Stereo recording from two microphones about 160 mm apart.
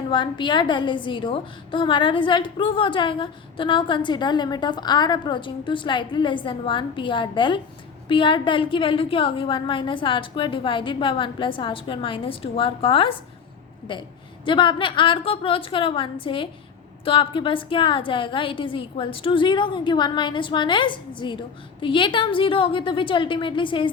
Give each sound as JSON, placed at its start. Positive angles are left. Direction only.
{"t": 0.1, "sound": "a woman's voice", "side_deg": 30}